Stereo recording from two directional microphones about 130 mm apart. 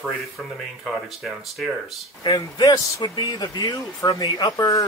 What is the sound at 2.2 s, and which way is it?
Speech, 35° left (ahead or behind).